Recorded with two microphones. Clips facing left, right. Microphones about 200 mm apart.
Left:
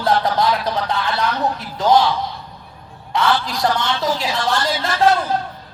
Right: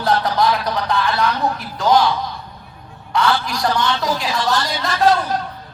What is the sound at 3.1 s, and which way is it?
A man's voice, 25° left (ahead or behind).